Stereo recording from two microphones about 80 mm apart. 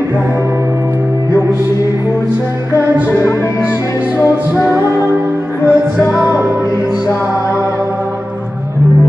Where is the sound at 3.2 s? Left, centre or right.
Left.